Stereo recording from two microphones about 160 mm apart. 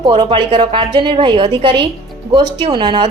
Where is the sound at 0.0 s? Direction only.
30° right (ahead or behind).